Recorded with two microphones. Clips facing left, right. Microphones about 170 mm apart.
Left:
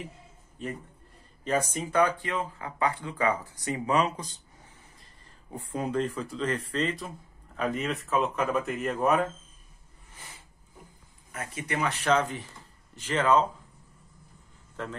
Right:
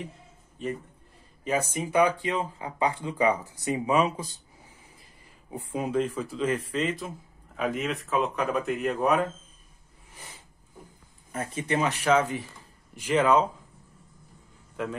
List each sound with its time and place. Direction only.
1.4 s speech: 10° right (ahead or behind)
11.3 s speech: 30° right (ahead or behind)
11.9 s speech: 10° right (ahead or behind)